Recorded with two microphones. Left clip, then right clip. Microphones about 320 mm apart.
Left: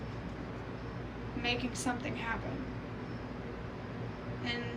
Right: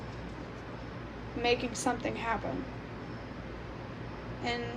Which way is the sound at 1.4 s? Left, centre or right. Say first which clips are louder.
Right 5 dB; centre.